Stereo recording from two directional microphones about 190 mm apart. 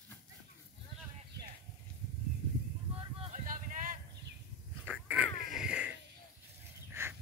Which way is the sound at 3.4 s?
45° right (ahead or behind).